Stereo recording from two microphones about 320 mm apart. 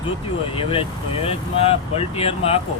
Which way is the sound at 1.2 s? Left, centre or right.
Centre.